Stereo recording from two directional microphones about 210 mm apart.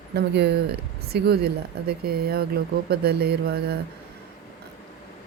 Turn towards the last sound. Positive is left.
turn(degrees=-50)  # may be behind; listen again after turning